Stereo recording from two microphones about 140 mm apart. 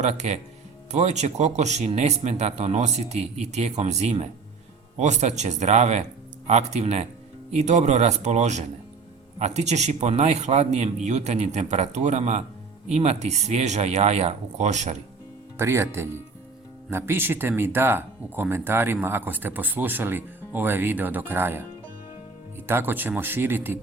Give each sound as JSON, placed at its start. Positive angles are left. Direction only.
{"t": 0.0, "sound": "speech", "side_deg": -55}
{"t": 15.5, "sound": "speech", "side_deg": -20}